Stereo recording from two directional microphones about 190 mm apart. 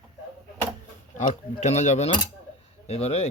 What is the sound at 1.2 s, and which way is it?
Speech, 40° left (ahead or behind).